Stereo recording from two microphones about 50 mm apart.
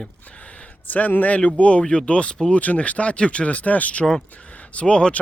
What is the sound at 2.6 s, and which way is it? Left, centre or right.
Speech, left.